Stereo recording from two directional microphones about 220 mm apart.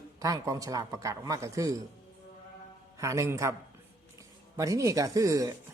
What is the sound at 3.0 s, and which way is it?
Speech, 15° right (ahead or behind).